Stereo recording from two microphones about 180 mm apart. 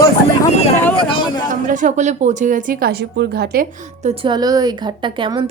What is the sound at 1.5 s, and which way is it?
A woman's voice, 45° right (ahead or behind).